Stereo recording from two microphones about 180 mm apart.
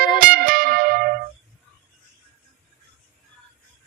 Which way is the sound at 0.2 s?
50° right (ahead or behind).